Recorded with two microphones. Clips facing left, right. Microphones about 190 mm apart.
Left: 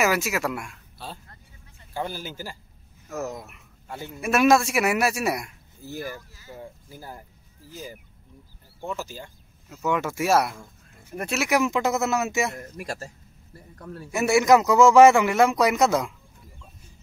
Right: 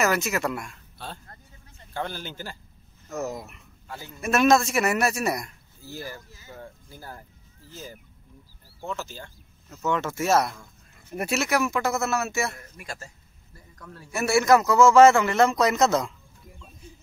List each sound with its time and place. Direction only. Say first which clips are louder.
0.0 s a man's voice: left 1 dB; 5° left (ahead or behind)
3.8 s speech: left 4 dB; 25° left (ahead or behind)
4.1 s a man's voice: left 1 dB; 10° left (ahead or behind)
5.8 s a man's voice: left 4 dB; 20° left (ahead or behind)
11.1 s speech: right 1 dB; 5° right (ahead or behind)
11.4 s a man's voice: left 5 dB; 15° left (ahead or behind)
12.7 s a man's voice: left 6 dB; 40° left (ahead or behind)
14.1 s a man's voice: left 2 dB; 15° left (ahead or behind)